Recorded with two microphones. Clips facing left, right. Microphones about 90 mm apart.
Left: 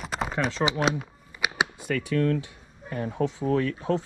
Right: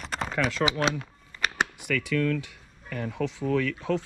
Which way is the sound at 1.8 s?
30° left (ahead or behind).